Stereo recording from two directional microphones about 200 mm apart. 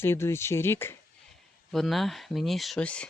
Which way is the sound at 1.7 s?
Centre (ahead or behind).